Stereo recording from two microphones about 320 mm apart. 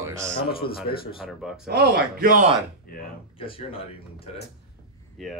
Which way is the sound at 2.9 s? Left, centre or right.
Left.